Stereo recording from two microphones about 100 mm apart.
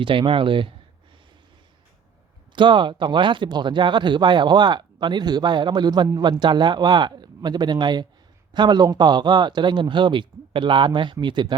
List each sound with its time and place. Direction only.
0.0 s speech: 60° right (ahead or behind)
2.6 s speech: 55° right (ahead or behind)